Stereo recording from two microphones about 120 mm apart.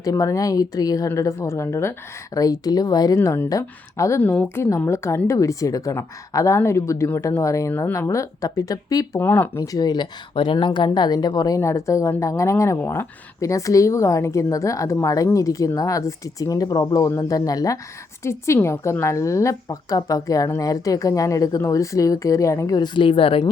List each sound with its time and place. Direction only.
0.0 s speech: 30° left (ahead or behind)
3.2 s speech: 20° left (ahead or behind)
4.2 s speech: 15° left (ahead or behind); by 9.2 s 30° left (ahead or behind)
9.2 s speech: 20° left (ahead or behind); by 23.4 s 50° left (ahead or behind)